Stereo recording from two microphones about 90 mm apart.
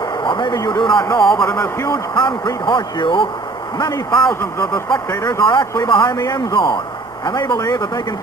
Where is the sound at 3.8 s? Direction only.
50° left (ahead or behind).